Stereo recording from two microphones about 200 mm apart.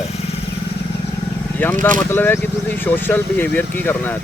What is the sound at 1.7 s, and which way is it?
Speech, 40° right (ahead or behind).